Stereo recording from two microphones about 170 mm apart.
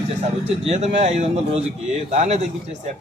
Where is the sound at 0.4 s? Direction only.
35° right (ahead or behind).